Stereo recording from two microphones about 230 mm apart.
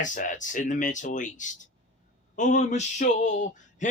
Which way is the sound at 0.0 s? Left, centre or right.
Left.